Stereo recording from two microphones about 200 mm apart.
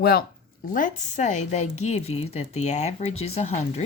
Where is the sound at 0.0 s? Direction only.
50° left (ahead or behind).